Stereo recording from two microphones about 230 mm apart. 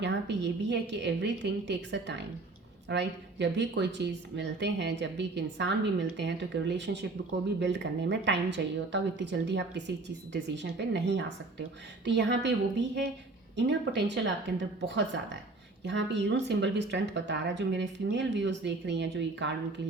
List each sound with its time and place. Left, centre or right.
0.0 s speech: right
13.6 s speech: right